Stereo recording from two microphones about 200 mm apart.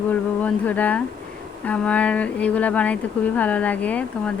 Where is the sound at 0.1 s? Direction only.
5° left (ahead or behind).